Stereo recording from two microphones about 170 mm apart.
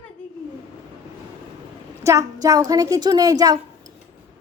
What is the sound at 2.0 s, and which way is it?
A woman's voice, 20° right (ahead or behind).